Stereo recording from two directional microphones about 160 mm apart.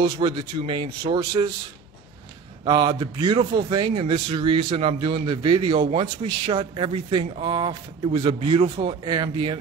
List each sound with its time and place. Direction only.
0.2 s speech: 30° right (ahead or behind)
2.6 s speech: 30° right (ahead or behind)